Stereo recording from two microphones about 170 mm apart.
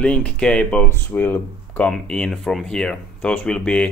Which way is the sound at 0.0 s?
5° left (ahead or behind).